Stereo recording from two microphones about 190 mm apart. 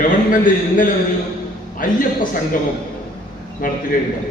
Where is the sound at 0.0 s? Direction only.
45° left (ahead or behind).